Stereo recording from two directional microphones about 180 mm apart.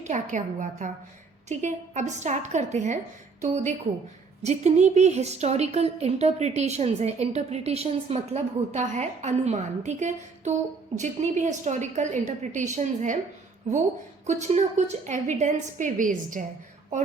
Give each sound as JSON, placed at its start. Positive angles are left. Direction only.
{"t": 0.0, "sound": "a woman's voice", "side_deg": -40}